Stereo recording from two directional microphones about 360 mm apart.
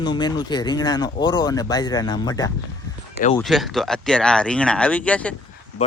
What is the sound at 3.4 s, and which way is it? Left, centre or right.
Speech, centre.